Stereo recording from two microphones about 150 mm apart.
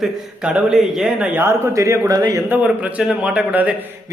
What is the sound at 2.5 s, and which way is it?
A man's voice, 10° right (ahead or behind).